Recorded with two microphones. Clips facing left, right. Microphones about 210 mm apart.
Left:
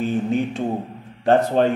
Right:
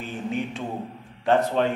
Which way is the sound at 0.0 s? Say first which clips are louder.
Left 8 dB; 40° left (ahead or behind).